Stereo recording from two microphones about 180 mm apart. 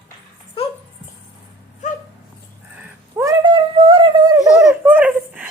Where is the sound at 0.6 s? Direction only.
30° left (ahead or behind).